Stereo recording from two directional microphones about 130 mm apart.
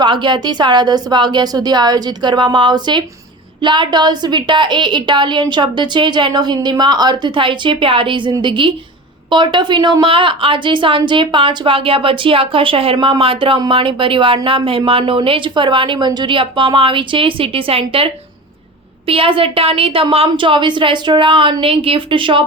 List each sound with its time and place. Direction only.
0.0 s a woman's voice: 35° right (ahead or behind)